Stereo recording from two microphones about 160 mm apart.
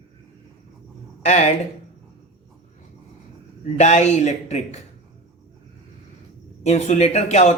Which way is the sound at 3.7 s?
45° left (ahead or behind).